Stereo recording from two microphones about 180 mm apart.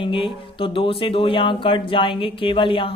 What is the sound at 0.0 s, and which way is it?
Speech, 30° left (ahead or behind).